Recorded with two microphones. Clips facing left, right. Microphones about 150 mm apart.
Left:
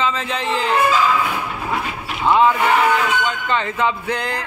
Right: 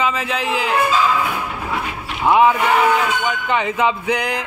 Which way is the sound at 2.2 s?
15° right (ahead or behind).